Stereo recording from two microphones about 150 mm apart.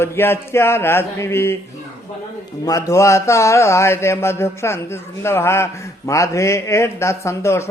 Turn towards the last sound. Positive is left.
turn(degrees=20)  # may be behind; listen again after turning